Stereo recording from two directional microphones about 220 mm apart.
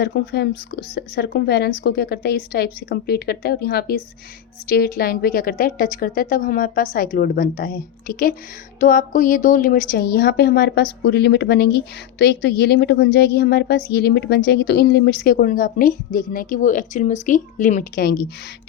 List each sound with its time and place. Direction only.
0.0 s a woman's voice: 50° left (ahead or behind)